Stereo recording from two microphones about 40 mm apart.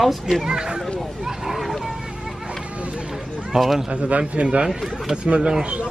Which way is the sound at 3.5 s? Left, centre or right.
Centre.